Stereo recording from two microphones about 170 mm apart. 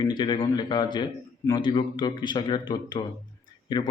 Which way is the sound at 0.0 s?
25° left (ahead or behind).